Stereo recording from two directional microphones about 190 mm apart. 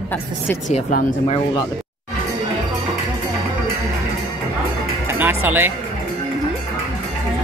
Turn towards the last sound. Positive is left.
turn(degrees=-10)  # may be behind; listen again after turning